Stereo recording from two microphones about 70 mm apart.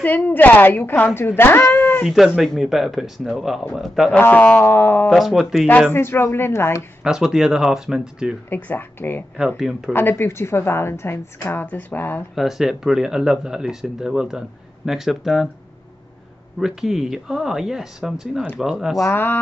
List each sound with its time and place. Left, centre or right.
0.0 s a woman's voice: left
2.0 s speech: centre
4.2 s a woman's voice: left
5.1 s speech: centre
5.9 s a woman's voice: left
7.0 s speech: centre
8.5 s a woman's voice: left
9.6 s speech: centre
9.9 s a woman's voice: left
12.4 s speech: centre
16.5 s speech: centre